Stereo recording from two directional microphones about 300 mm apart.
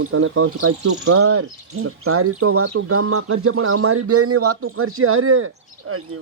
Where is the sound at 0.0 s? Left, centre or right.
Right.